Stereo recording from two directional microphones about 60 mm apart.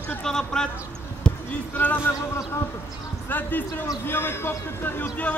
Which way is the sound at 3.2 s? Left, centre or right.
Left.